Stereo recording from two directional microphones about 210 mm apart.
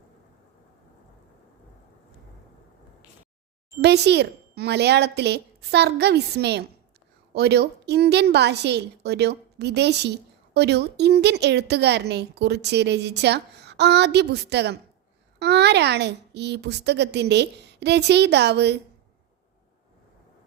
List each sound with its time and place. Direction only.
3.8 s a woman's voice: 50° right (ahead or behind)